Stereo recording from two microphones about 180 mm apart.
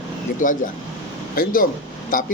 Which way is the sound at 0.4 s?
45° left (ahead or behind).